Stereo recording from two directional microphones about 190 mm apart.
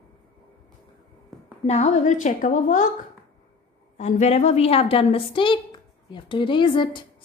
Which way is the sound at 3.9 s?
40° left (ahead or behind).